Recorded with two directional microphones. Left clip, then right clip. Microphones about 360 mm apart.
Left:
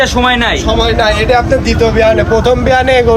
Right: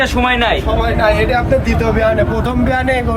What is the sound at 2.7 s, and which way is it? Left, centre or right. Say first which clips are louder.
Speech: left 5 dB; centre.